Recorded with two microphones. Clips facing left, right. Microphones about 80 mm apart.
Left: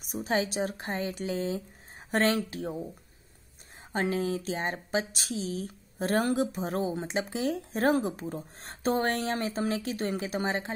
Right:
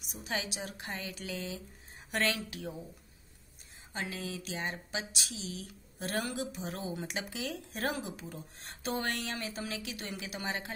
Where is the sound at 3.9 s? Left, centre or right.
Left.